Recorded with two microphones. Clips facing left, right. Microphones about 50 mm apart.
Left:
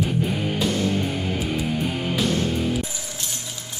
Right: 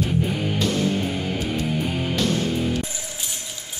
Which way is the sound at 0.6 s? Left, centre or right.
Centre.